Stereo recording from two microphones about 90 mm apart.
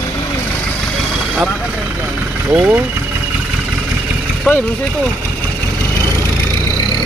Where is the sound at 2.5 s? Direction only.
15° right (ahead or behind).